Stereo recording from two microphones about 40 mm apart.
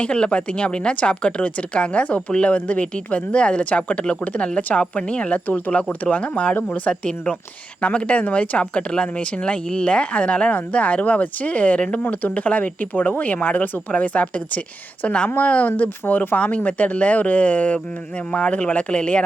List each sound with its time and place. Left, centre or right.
0.0 s speech: left
5.5 s speech: left
15.0 s speech: left
15.4 s speech: left